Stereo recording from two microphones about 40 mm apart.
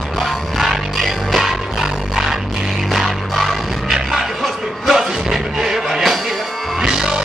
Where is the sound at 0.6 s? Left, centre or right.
Centre.